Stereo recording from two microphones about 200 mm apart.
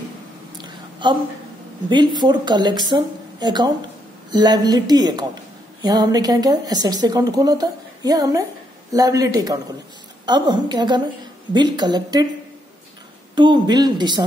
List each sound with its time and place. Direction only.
0.6 s a sound: 25° right (ahead or behind)
1.9 s a woman's voice: 20° right (ahead or behind)
13.3 s a woman's voice: 20° right (ahead or behind)